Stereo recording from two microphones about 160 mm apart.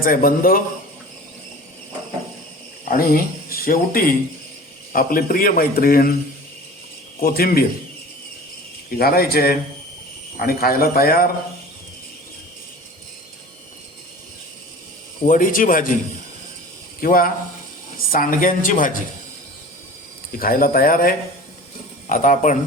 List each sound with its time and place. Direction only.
0.0 s a man's voice: 60° left (ahead or behind)
2.9 s a man's voice: 65° left (ahead or behind)
7.2 s a man's voice: 70° left (ahead or behind)
9.0 s a man's voice: 70° left (ahead or behind)
15.2 s a man's voice: 55° left (ahead or behind)
17.0 s a man's voice: 65° left (ahead or behind)
20.4 s a man's voice: 65° left (ahead or behind)